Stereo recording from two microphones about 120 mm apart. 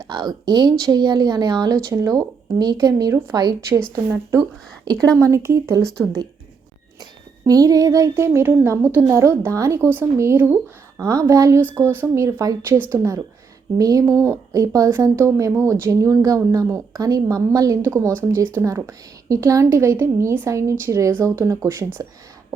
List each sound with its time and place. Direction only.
0.0 s a woman's voice: 35° right (ahead or behind)
7.0 s a woman's voice: 30° right (ahead or behind); by 11.0 s 10° right (ahead or behind)
11.0 s a woman's voice: 30° right (ahead or behind)
11.6 s a woman's voice: 15° right (ahead or behind)